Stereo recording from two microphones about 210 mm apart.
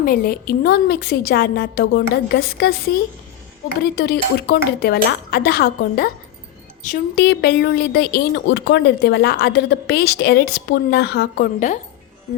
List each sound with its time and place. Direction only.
0.0 s a woman's voice: 45° left (ahead or behind)
3.8 s a woman's voice: 50° left (ahead or behind)